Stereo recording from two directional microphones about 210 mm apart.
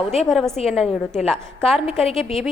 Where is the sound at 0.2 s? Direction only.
Centre (ahead or behind).